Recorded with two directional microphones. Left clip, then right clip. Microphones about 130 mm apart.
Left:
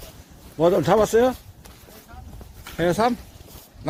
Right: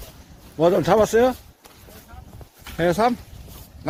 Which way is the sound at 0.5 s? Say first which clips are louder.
Right 1 dB; 25° right (ahead or behind).